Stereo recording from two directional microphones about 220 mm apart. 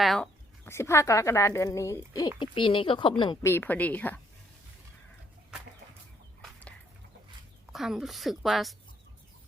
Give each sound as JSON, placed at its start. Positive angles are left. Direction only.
{"t": 0.0, "sound": "speech", "side_deg": 0}
{"t": 3.5, "sound": "a woman's voice", "side_deg": 10}
{"t": 6.4, "sound": "a sound", "side_deg": 5}
{"t": 7.7, "sound": "a woman's voice", "side_deg": 0}